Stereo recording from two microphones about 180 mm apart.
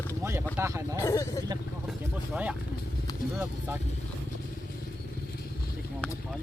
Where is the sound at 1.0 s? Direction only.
15° left (ahead or behind).